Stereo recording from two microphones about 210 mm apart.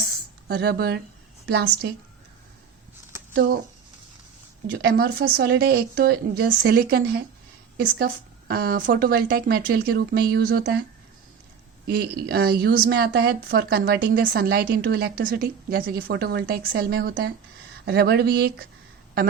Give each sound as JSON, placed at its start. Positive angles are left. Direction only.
{"t": 0.4, "sound": "a woman's voice", "side_deg": -50}
{"t": 4.7, "sound": "a woman's voice", "side_deg": -50}
{"t": 11.9, "sound": "a woman's voice", "side_deg": -45}